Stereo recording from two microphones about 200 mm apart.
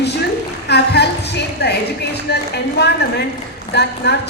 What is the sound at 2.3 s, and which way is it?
A woman's voice, 55° left (ahead or behind).